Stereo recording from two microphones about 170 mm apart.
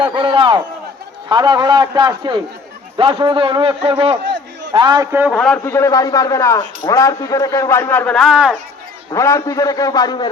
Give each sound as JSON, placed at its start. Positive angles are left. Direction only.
{"t": 0.0, "sound": "a man's voice", "side_deg": -30}
{"t": 5.3, "sound": "a man's voice", "side_deg": 5}
{"t": 5.6, "sound": "a man's voice", "side_deg": 15}
{"t": 9.1, "sound": "a man's voice", "side_deg": 15}